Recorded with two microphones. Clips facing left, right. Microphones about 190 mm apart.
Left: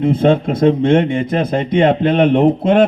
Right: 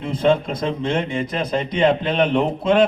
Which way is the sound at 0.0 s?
55° left (ahead or behind).